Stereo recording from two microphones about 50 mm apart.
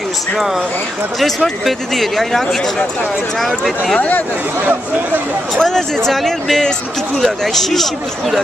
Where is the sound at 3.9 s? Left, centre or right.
Left.